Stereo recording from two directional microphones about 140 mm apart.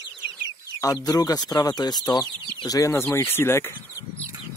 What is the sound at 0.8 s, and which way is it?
Speech, 25° left (ahead or behind).